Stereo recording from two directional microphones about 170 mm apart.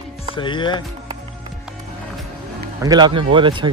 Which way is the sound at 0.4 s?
30° left (ahead or behind).